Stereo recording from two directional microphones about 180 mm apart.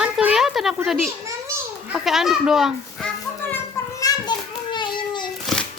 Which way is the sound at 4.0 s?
20° left (ahead or behind).